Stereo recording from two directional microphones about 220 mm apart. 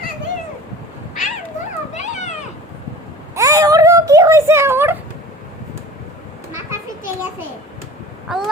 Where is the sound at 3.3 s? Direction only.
15° right (ahead or behind).